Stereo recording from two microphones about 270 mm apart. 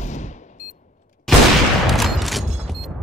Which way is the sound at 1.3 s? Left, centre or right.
Centre.